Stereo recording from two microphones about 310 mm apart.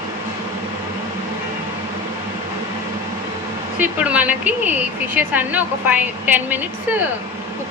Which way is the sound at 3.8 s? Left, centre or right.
Centre.